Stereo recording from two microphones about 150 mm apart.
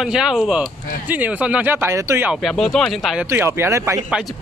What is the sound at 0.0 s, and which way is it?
Speech, 5° right (ahead or behind).